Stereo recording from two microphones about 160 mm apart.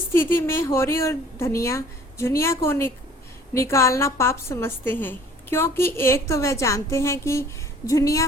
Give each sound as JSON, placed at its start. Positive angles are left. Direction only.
{"t": 0.1, "sound": "a woman's voice", "side_deg": 15}